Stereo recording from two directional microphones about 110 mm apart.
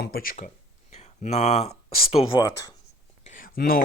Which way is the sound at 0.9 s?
85° left.